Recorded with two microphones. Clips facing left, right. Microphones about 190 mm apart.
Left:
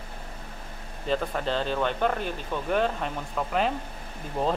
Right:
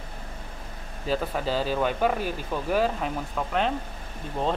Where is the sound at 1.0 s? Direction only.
5° right (ahead or behind).